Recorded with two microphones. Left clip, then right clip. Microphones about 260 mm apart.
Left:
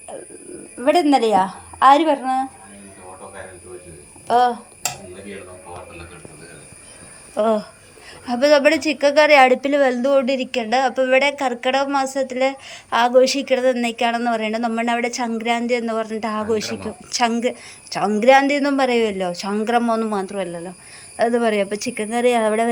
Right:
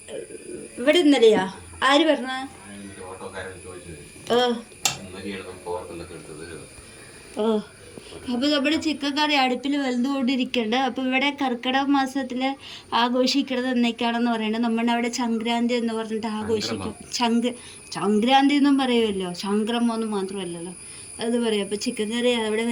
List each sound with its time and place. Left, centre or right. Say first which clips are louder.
0.9 s a woman's voice: left 1 dB; centre
4.3 s a sound: left 5 dB; centre
7.3 s a woman's voice: left 6 dB; centre